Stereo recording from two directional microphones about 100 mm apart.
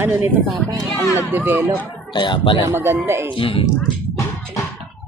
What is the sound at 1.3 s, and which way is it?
Speech, 20° right (ahead or behind).